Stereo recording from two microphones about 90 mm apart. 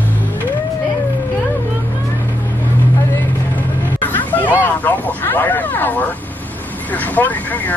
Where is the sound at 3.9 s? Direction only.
20° left (ahead or behind).